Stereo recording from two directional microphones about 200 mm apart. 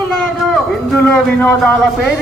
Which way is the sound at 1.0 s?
10° left (ahead or behind).